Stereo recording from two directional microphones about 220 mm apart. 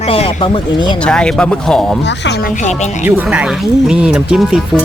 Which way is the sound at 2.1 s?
50° left (ahead or behind).